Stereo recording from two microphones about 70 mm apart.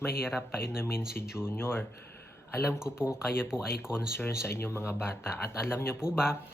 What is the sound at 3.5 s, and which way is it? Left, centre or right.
Speech, centre.